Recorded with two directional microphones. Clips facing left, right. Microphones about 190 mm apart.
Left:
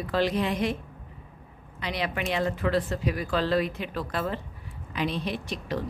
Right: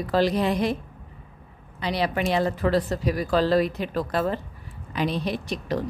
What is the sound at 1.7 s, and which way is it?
A woman's voice, 35° right (ahead or behind).